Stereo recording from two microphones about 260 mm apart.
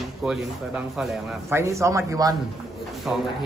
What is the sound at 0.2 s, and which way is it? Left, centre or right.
Speech, centre.